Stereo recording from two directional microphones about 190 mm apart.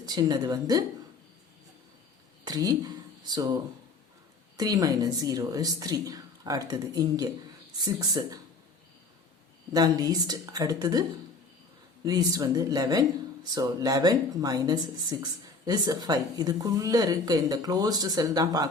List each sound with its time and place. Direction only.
0.0 s a woman's voice: 20° right (ahead or behind)
2.5 s a woman's voice: 20° right (ahead or behind)
9.7 s a woman's voice: 20° right (ahead or behind)
12.0 s a woman's voice: 20° right (ahead or behind)